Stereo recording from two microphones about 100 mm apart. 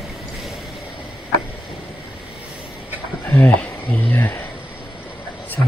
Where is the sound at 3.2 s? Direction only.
20° left (ahead or behind).